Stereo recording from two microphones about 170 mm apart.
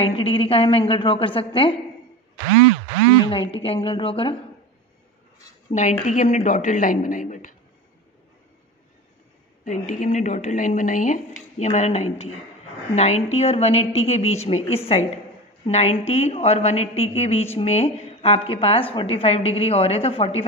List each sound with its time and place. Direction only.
0.0 s a woman's voice: 30° left (ahead or behind)
3.3 s a woman's voice: 30° left (ahead or behind)
5.7 s speech: 45° left (ahead or behind)
9.7 s a woman's voice: 50° left (ahead or behind)